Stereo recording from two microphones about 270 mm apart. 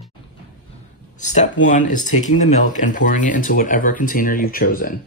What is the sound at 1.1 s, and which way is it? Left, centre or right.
Speech, left.